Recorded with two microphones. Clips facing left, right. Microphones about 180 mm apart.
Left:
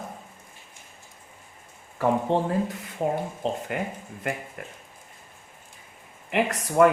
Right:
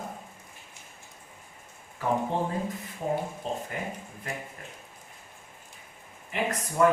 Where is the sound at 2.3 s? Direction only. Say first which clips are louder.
Left 5 dB; 75° left (ahead or behind).